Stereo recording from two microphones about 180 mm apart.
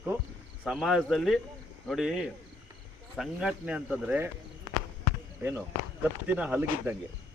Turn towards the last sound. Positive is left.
turn(degrees=-10)  # may be behind; listen again after turning